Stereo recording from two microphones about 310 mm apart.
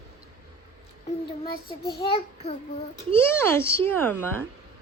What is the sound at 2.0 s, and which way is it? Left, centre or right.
Speech, centre.